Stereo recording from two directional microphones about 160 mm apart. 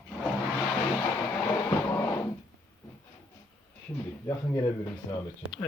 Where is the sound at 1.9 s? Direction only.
20° left (ahead or behind).